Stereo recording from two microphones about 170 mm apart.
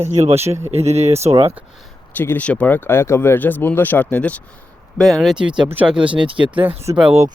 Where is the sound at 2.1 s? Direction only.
10° left (ahead or behind); by 6.1 s 5° right (ahead or behind).